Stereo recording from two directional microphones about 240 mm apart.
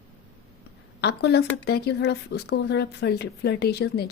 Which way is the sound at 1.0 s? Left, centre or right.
Left.